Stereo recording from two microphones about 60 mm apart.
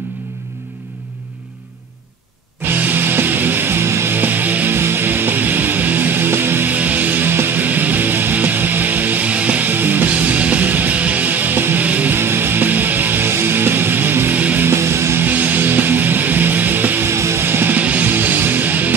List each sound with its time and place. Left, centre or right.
2.7 s music: right
4.2 s music: right
6.7 s music: right
12.2 s music: right
17.1 s music: right
17.7 s music: right